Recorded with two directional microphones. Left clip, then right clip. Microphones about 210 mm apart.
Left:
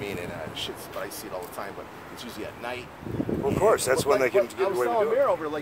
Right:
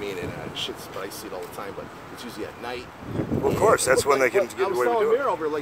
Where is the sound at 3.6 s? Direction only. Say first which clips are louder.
Right 3 dB; 20° right (ahead or behind).